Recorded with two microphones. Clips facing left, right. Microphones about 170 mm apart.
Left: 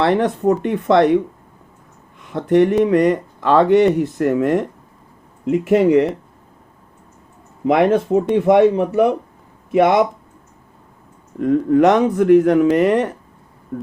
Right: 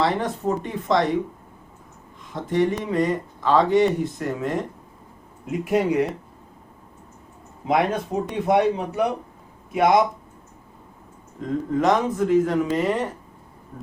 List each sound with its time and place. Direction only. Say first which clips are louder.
0.0 s speech: left 7 dB; 70° left (ahead or behind)
2.3 s speech: left 8 dB; 70° left (ahead or behind)
7.6 s speech: left 7 dB; 60° left (ahead or behind)
11.3 s speech: left 10 dB; 70° left (ahead or behind)